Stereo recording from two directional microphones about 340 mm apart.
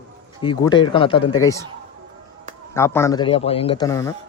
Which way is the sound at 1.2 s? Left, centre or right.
Left.